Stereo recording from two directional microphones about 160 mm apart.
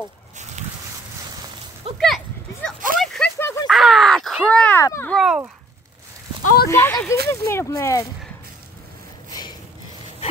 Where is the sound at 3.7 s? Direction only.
Centre (ahead or behind).